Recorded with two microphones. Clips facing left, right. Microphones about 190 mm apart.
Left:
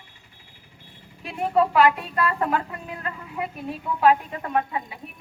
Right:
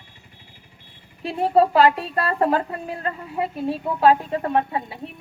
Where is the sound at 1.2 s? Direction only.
30° right (ahead or behind).